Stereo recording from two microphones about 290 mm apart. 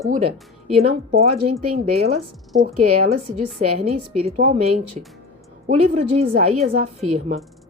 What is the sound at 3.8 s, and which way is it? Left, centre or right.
A woman's voice, right.